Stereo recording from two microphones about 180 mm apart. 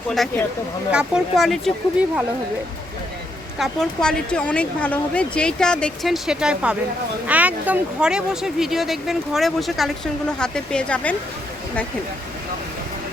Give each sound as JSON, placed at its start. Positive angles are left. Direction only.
{"t": 0.9, "sound": "speech", "side_deg": -5}
{"t": 3.6, "sound": "speech", "side_deg": 5}